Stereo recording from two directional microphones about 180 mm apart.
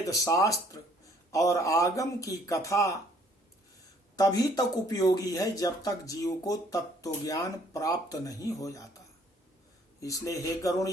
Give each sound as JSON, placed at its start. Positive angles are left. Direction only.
{"t": 0.1, "sound": "speech", "side_deg": 15}
{"t": 4.2, "sound": "speech", "side_deg": 20}
{"t": 10.0, "sound": "speech", "side_deg": 20}